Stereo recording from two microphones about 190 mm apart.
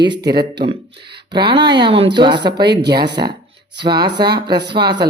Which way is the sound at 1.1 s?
25° right (ahead or behind).